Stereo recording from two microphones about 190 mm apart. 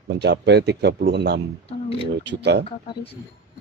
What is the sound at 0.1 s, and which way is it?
A man's voice, 60° right (ahead or behind).